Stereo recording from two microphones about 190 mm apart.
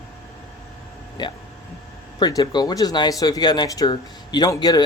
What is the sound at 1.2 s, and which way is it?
Speech, 20° left (ahead or behind).